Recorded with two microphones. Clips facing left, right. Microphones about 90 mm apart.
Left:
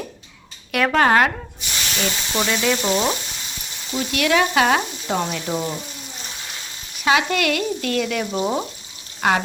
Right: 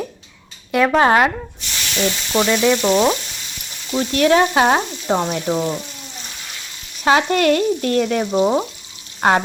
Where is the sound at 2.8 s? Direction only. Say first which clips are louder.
Right 5 dB; 30° right (ahead or behind).